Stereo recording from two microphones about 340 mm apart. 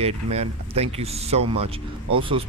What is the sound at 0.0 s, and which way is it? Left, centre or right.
Speech, centre.